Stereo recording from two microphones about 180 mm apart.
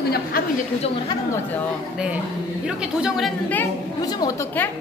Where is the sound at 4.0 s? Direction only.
20° left (ahead or behind).